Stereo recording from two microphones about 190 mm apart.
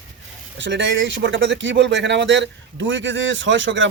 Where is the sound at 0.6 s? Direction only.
70° right (ahead or behind).